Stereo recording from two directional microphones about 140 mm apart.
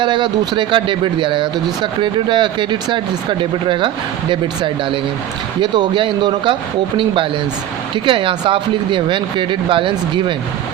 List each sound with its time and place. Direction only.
0.0 s speech: 35° right (ahead or behind)